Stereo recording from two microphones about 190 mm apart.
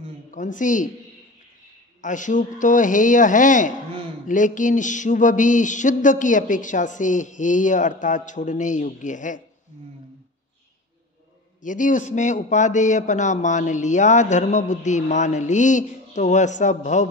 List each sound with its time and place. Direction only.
0.3 s a man's voice: 45° left (ahead or behind)
2.0 s a man's voice: 40° left (ahead or behind)
11.6 s a man's voice: 45° left (ahead or behind)